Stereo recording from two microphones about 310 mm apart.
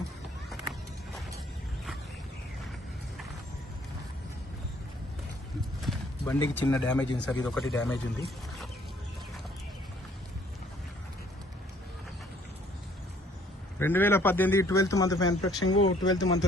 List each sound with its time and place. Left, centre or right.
5.8 s clip-clop: centre
6.4 s speech: centre
13.7 s a man's voice: centre
15.6 s speech: left
16.0 s a man's voice: centre